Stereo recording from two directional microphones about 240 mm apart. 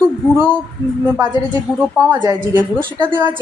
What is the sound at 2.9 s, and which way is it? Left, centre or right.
Speech, centre.